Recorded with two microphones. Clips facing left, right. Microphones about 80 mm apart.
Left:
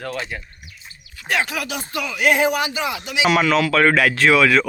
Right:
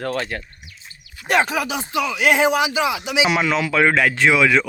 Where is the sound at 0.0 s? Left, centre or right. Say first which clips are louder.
Right 4 dB; right.